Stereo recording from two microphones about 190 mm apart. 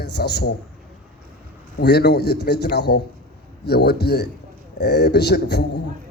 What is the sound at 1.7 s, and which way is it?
Speech, 60° left (ahead or behind).